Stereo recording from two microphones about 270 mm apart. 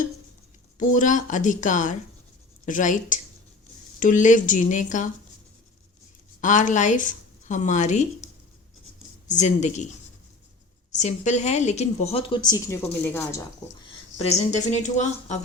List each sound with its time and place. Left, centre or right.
0.8 s a woman's voice: left
6.4 s a woman's voice: left
10.9 s a woman's voice: left; by 13.4 s centre
13.8 s a woman's voice: left